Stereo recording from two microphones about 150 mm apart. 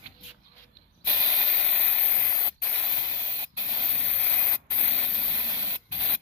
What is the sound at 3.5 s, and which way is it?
Spray, 25° right (ahead or behind).